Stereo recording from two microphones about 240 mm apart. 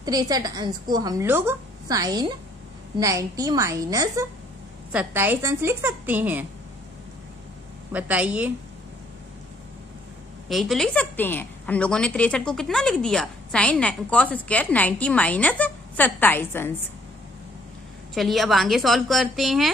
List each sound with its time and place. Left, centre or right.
0.0 s a woman's voice: centre
7.9 s a woman's voice: centre
10.5 s a woman's voice: centre
18.1 s a woman's voice: centre